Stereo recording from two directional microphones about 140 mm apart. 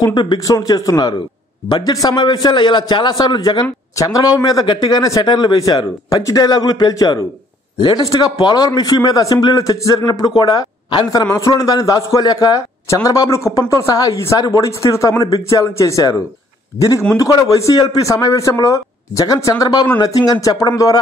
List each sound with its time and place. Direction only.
0.0 s a man's voice: 30° left (ahead or behind)